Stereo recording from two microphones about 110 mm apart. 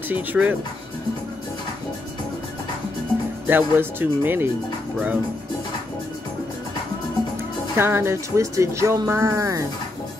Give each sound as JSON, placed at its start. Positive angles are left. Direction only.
{"t": 0.1, "sound": "speech", "side_deg": -15}
{"t": 3.4, "sound": "speech", "side_deg": -20}
{"t": 7.7, "sound": "speech", "side_deg": -20}